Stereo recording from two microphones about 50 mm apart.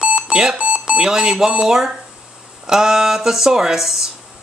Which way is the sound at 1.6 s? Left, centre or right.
Centre.